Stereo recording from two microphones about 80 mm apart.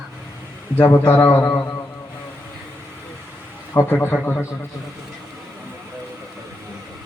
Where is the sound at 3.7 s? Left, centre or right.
Left.